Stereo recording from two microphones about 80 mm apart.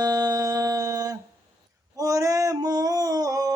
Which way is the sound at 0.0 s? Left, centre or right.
Right.